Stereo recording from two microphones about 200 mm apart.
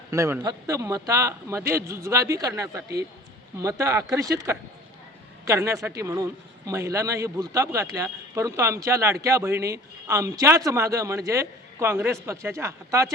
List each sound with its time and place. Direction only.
0.1 s speech: 15° right (ahead or behind)